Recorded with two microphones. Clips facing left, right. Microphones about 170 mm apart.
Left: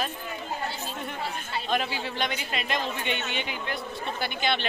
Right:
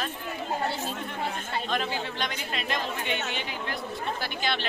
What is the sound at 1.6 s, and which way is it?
A woman's voice, 5° left (ahead or behind).